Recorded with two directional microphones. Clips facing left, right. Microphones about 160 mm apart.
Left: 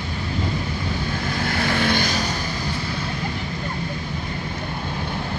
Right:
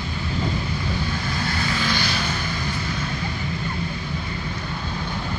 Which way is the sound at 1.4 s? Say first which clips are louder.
Left 5 dB; 55° left (ahead or behind).